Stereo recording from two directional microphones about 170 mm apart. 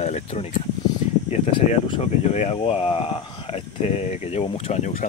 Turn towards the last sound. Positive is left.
turn(degrees=40)  # may be behind; listen again after turning